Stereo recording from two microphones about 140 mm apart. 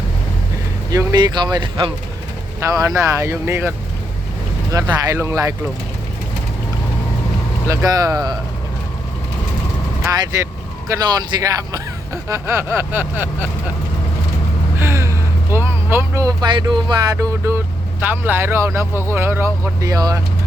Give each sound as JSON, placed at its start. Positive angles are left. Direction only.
{"t": 0.9, "sound": "speech", "side_deg": -30}
{"t": 2.6, "sound": "speech", "side_deg": -25}
{"t": 7.7, "sound": "speech", "side_deg": -20}
{"t": 10.1, "sound": "speech", "side_deg": -20}
{"t": 14.8, "sound": "speech", "side_deg": -20}